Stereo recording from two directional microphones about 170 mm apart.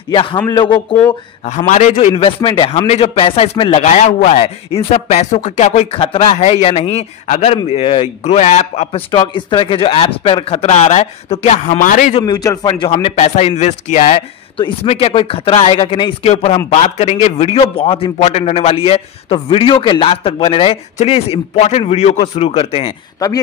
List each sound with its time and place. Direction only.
0.1 s a man's voice: 30° left (ahead or behind); by 12.2 s 50° left (ahead or behind)
12.2 s a man's voice: 20° left (ahead or behind)
13.1 s a man's voice: 40° left (ahead or behind)
23.1 s speech: 20° left (ahead or behind)